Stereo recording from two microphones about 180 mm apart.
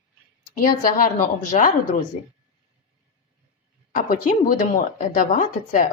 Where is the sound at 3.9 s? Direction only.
50° left (ahead or behind).